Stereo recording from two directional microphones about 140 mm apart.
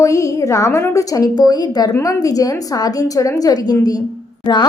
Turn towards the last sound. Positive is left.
turn(degrees=30)  # may be behind; listen again after turning